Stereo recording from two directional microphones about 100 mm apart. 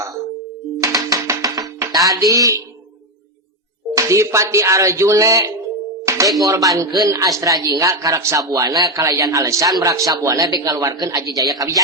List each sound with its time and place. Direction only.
0.8 s music: 35° right (ahead or behind)
2.0 s a woman's voice: 35° right (ahead or behind)
3.9 s a woman's voice: 30° right (ahead or behind)
6.1 s music: 30° right (ahead or behind)
6.4 s a woman's voice: 35° right (ahead or behind)